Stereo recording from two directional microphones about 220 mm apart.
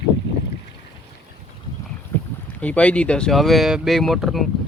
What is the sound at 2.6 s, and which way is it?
Speech, 5° left (ahead or behind).